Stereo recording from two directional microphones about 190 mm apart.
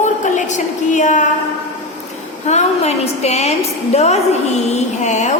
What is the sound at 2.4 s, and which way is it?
A woman's voice, 35° left (ahead or behind).